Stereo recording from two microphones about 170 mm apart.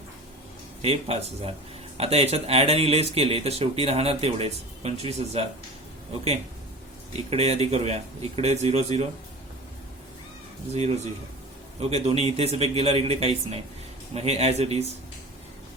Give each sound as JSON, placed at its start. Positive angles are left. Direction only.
{"t": 0.8, "sound": "speech", "side_deg": -35}
{"t": 7.3, "sound": "speech", "side_deg": -40}
{"t": 11.8, "sound": "speech", "side_deg": -35}